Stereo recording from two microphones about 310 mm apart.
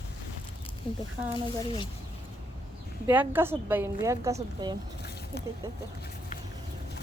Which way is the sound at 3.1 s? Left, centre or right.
Centre.